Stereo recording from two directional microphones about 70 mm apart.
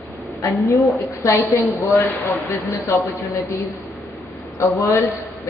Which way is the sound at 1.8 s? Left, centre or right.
Left.